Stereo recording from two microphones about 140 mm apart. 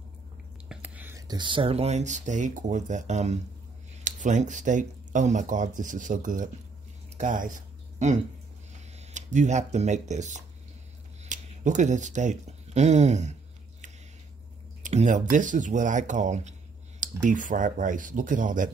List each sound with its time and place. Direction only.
0.7 s whispering: 10° right (ahead or behind)
1.1 s speech: 30° right (ahead or behind); by 10.4 s 55° right (ahead or behind)
11.2 s a sound: 60° right (ahead or behind)
14.8 s speech: 60° right (ahead or behind)